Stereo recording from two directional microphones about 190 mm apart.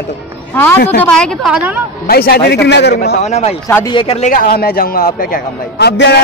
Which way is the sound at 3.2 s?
35° left (ahead or behind).